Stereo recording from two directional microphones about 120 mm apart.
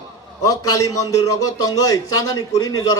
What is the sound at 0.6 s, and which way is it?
A man's voice, 30° left (ahead or behind).